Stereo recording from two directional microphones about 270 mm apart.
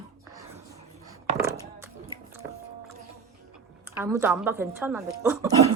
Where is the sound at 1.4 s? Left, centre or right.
Centre.